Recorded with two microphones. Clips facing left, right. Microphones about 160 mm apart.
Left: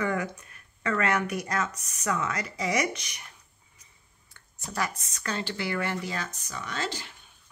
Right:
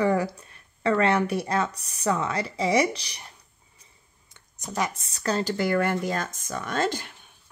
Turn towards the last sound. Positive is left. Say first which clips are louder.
# right 7 dB
turn(degrees=-50)  # may be behind; listen again after turning